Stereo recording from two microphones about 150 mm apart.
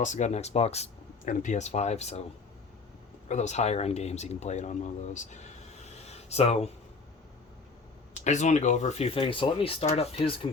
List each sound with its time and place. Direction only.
0.0 s speech: 55° left (ahead or behind)
3.2 s speech: 50° left (ahead or behind)
6.1 s a sound: 45° left (ahead or behind)
8.2 s speech: 50° left (ahead or behind)